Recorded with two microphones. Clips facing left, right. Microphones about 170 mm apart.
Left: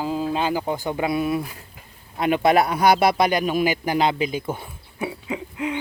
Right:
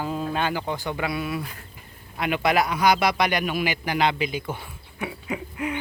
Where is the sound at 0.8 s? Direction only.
25° left (ahead or behind).